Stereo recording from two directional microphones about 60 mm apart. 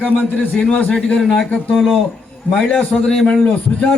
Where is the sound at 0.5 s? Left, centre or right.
Left.